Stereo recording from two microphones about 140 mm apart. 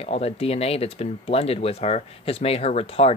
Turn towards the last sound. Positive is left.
turn(degrees=45)  # may be behind; listen again after turning